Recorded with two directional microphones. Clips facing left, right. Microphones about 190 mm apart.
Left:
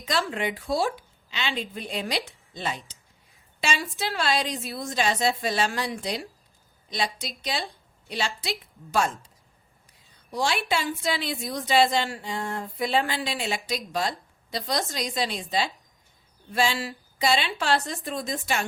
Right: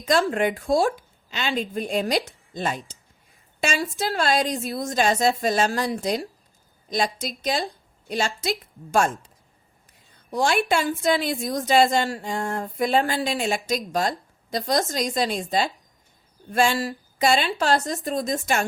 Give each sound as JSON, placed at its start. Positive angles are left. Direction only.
{"t": 0.0, "sound": "a woman's voice", "side_deg": -45}
{"t": 10.3, "sound": "a woman's voice", "side_deg": -50}